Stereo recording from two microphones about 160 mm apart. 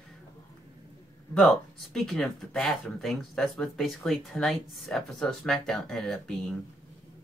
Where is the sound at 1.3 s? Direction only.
Centre (ahead or behind).